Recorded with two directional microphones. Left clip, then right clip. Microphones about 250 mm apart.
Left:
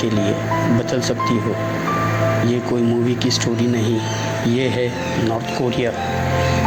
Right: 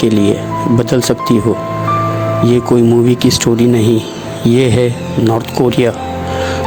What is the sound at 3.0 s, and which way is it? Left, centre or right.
Speech, right.